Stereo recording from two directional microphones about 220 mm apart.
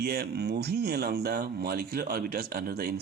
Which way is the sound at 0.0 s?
45° right (ahead or behind).